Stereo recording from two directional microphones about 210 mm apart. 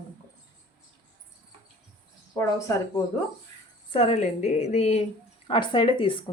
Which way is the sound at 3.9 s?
30° left (ahead or behind).